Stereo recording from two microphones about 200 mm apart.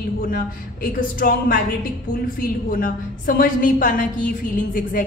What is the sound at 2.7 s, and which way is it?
A man's voice, 45° left (ahead or behind).